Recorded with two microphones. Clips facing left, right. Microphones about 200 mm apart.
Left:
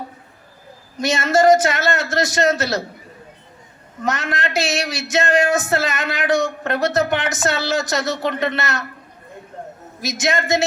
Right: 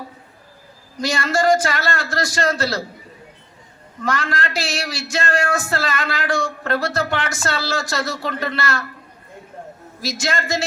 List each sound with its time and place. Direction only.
0.9 s speech: 20° left (ahead or behind)
4.0 s speech: 20° left (ahead or behind)
10.0 s speech: 20° left (ahead or behind)